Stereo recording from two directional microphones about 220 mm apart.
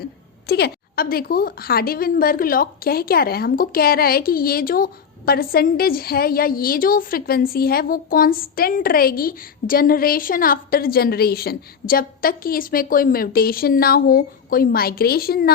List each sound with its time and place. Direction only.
0.4 s a woman's voice: 45° left (ahead or behind)